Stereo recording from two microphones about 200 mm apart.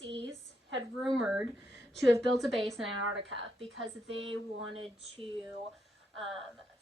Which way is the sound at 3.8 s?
75° right (ahead or behind).